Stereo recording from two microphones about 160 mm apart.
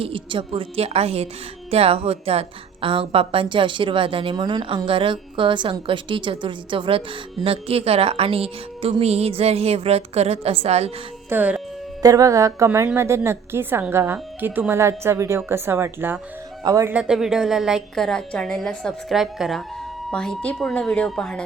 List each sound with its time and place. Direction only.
0.0 s a woman's voice: 35° right (ahead or behind)
11.3 s a woman's voice: 10° right (ahead or behind)
12.0 s a woman's voice: 20° right (ahead or behind)
16.9 s a woman's voice: 5° right (ahead or behind)